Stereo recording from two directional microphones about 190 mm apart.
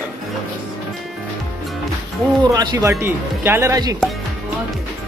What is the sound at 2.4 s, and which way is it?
Speech, 20° right (ahead or behind).